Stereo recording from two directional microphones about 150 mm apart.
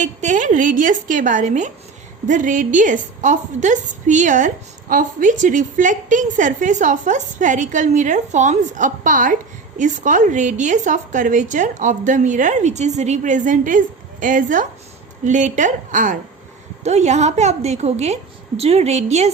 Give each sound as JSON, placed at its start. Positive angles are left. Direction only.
{"t": 0.0, "sound": "a woman's voice", "side_deg": -55}
{"t": 16.8, "sound": "a woman's voice", "side_deg": -50}